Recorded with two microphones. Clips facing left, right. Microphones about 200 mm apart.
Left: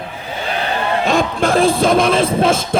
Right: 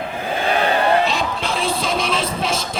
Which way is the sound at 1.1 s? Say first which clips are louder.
Left 7 dB; 50° left (ahead or behind).